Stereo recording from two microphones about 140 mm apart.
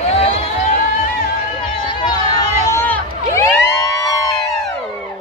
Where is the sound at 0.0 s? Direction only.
45° left (ahead or behind).